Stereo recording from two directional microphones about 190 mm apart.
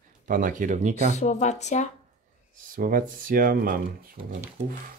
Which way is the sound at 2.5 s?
45° right (ahead or behind).